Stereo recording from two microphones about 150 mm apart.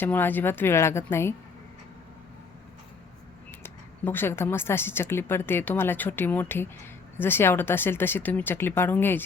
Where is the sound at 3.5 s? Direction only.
15° left (ahead or behind).